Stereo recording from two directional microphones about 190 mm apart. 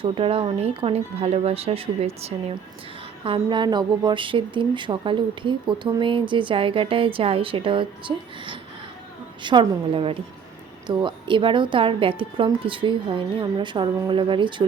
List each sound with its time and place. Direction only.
0.0 s a woman's voice: 30° right (ahead or behind)